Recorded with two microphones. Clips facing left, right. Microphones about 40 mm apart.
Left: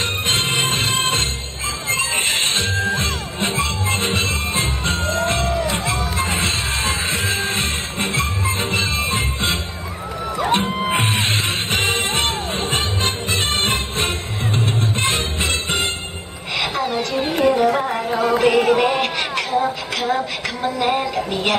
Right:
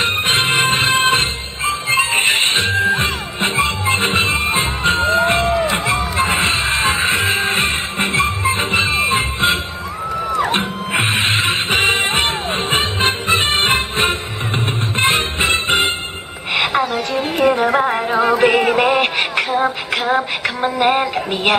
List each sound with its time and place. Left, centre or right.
0.0 s music: right
11.1 s music: right
17.4 s a sound: right